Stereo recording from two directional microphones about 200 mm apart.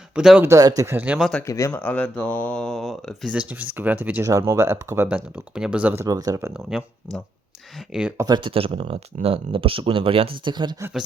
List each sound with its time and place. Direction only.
0.1 s speech: 5° right (ahead or behind)
0.4 s speech: 15° right (ahead or behind)
1.3 s speech: 10° left (ahead or behind); by 6.5 s 20° right (ahead or behind)
6.5 s speech: 5° right (ahead or behind)
8.3 s speech: 25° right (ahead or behind)